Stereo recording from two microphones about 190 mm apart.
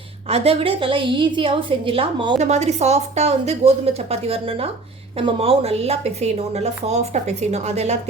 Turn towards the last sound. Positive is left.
turn(degrees=-35)  # may be behind; listen again after turning